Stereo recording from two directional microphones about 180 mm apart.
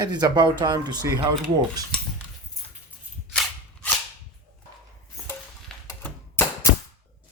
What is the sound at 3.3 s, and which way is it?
Cap gun, 5° left (ahead or behind).